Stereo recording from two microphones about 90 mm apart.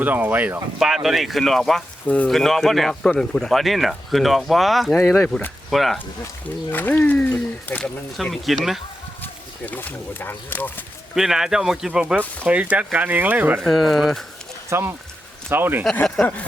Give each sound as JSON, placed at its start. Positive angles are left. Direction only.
{"t": 0.0, "sound": "speech", "side_deg": -20}
{"t": 0.8, "sound": "speech", "side_deg": -5}
{"t": 2.0, "sound": "speech", "side_deg": 15}
{"t": 2.3, "sound": "speech", "side_deg": 5}
{"t": 6.7, "sound": "speech", "side_deg": 20}
{"t": 8.1, "sound": "speech", "side_deg": 0}
{"t": 9.2, "sound": "speech", "side_deg": 20}
{"t": 11.1, "sound": "speech", "side_deg": -5}
{"t": 13.6, "sound": "speech", "side_deg": 0}
{"t": 14.7, "sound": "speech", "side_deg": -25}
{"t": 16.2, "sound": "speech", "side_deg": 5}